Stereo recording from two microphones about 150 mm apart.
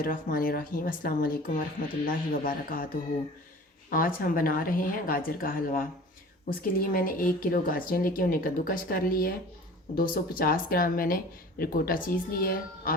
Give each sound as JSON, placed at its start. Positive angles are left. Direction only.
{"t": 0.0, "sound": "speech", "side_deg": 70}